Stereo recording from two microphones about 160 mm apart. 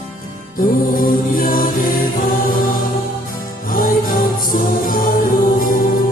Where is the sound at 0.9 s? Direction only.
60° left (ahead or behind).